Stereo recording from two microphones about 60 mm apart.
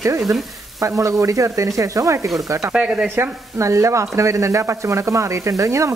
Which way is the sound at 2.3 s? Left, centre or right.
Right.